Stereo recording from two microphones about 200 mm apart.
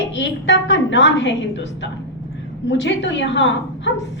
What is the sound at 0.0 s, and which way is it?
A woman's voice, 65° left (ahead or behind).